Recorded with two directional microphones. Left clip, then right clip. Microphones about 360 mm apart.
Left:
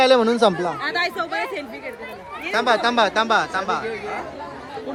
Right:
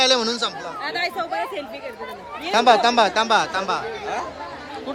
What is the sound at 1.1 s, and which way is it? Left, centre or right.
Speech, left.